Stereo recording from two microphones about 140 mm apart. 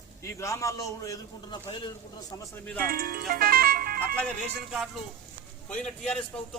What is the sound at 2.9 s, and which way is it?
Speech, 90° right.